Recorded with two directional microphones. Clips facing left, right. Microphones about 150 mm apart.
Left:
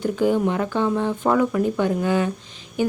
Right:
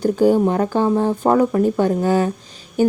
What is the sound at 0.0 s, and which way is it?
Speech, 35° right (ahead or behind).